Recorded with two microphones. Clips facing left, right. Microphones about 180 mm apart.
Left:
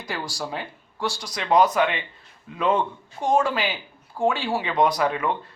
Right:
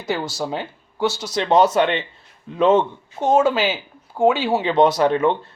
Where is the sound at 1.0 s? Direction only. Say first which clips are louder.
Right 7 dB; 5° right (ahead or behind).